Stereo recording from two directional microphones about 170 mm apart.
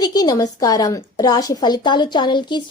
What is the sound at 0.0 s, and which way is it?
A woman's voice, 25° left (ahead or behind).